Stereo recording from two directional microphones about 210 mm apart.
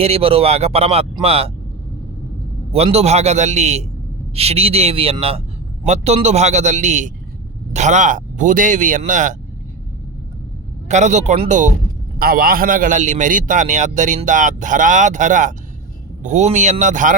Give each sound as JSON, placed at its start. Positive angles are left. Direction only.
{"t": 0.0, "sound": "speech", "side_deg": -25}
{"t": 2.7, "sound": "a man's voice", "side_deg": -30}
{"t": 10.8, "sound": "a man's voice", "side_deg": -35}
{"t": 12.2, "sound": "a man's voice", "side_deg": -45}